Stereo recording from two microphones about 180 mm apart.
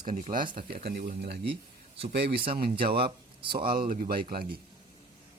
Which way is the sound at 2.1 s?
65° right (ahead or behind).